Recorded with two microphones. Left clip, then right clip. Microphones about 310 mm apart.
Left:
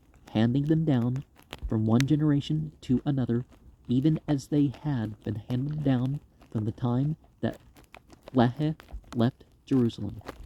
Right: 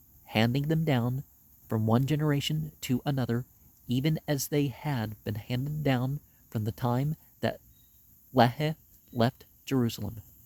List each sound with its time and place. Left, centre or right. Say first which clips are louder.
0.3 s speech: left 2 dB; centre
8.4 s speech: right 2 dB; centre